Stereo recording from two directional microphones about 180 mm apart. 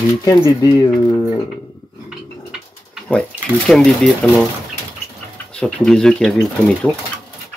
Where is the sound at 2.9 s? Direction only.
5° left (ahead or behind).